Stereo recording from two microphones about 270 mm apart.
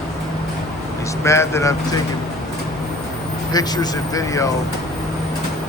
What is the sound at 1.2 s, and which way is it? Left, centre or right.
Speech, centre.